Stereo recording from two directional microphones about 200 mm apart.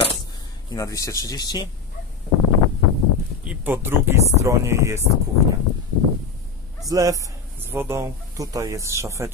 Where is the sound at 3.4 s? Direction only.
10° right (ahead or behind).